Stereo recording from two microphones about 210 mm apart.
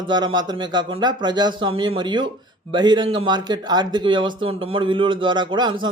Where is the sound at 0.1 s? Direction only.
20° right (ahead or behind).